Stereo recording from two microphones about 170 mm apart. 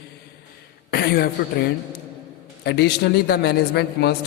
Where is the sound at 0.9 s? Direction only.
65° left (ahead or behind).